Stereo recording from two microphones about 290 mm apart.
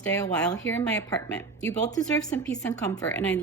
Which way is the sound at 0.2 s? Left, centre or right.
Centre.